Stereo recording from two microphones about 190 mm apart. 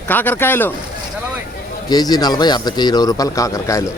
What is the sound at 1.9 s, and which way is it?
Speech, 20° left (ahead or behind).